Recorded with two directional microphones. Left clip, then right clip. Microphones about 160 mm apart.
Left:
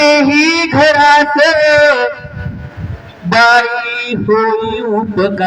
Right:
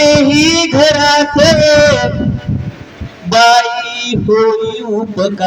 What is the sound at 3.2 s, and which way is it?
Speech, 35° right (ahead or behind).